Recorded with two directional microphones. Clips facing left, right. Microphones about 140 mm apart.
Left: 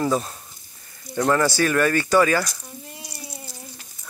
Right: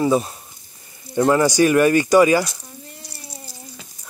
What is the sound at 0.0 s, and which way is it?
Speech, 10° right (ahead or behind).